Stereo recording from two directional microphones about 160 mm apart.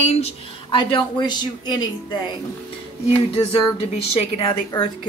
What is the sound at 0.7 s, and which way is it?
Speech, 30° left (ahead or behind).